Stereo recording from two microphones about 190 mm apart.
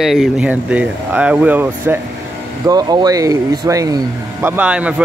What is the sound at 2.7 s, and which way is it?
Speech, 20° right (ahead or behind).